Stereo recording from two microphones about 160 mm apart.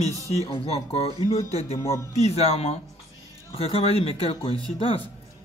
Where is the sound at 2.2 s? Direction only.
40° left (ahead or behind).